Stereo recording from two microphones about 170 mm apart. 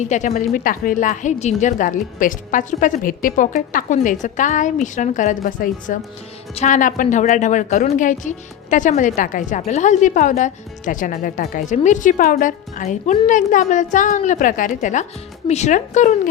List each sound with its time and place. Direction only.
0.1 s a woman's voice: 45° left (ahead or behind)